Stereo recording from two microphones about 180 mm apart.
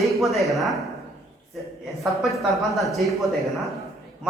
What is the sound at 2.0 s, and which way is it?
A woman's voice, centre (ahead or behind).